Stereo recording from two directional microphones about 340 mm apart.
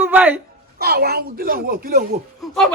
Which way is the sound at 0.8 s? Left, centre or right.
Right.